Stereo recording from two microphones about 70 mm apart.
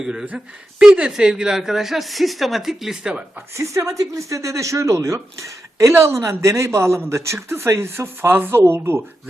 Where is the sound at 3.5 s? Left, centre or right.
Right.